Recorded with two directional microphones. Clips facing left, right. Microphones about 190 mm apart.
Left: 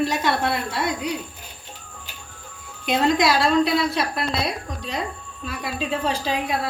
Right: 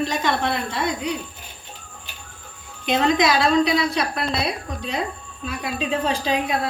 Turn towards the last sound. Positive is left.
turn(degrees=5)  # may be behind; listen again after turning